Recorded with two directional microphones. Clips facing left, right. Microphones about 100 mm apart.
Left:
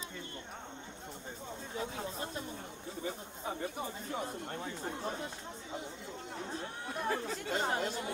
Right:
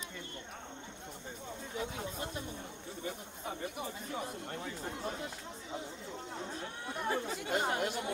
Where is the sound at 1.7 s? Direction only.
30° left (ahead or behind).